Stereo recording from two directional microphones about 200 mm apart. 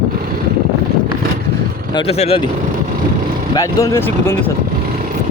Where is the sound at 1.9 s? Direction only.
25° left (ahead or behind).